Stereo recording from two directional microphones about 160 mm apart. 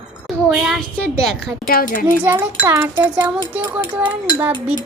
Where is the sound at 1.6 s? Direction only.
60° left (ahead or behind).